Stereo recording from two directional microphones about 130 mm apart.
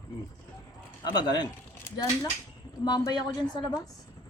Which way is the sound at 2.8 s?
30° left (ahead or behind).